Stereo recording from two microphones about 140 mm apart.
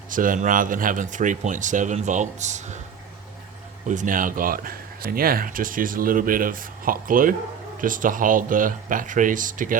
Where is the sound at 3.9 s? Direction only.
65° right (ahead or behind).